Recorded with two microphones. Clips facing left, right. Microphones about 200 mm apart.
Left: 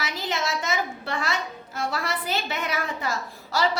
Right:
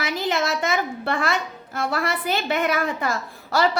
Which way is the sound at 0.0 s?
55° right (ahead or behind).